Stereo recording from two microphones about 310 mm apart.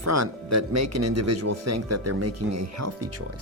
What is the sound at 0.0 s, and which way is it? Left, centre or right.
Speech, right.